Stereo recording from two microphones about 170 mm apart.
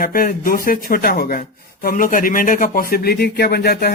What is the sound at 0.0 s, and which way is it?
A man's voice, 55° left (ahead or behind).